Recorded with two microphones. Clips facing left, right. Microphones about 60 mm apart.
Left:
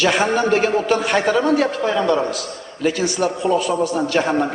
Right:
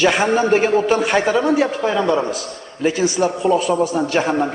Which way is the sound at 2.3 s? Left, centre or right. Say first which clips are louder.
Even; right.